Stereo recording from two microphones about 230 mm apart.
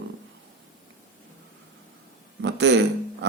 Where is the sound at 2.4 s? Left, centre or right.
Right.